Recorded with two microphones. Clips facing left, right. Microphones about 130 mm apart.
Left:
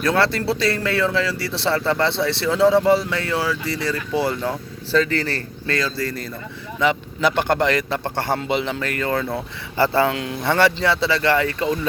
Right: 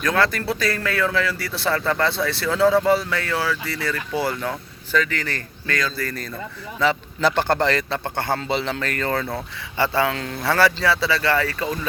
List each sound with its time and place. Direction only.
0.0 s speech: 30° left (ahead or behind)
7.2 s speech: 35° right (ahead or behind)
8.0 s speech: 30° left (ahead or behind)
8.4 s speech: 15° left (ahead or behind)
9.7 s speech: 30° left (ahead or behind)
10.2 s speech: 20° left (ahead or behind)